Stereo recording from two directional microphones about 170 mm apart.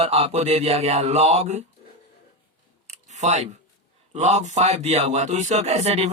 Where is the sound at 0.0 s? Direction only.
35° right (ahead or behind).